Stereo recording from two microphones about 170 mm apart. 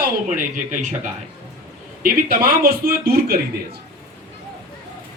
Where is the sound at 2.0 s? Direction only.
65° right (ahead or behind).